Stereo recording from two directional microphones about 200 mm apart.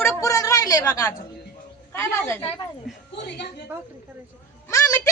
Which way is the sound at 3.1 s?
60° left (ahead or behind).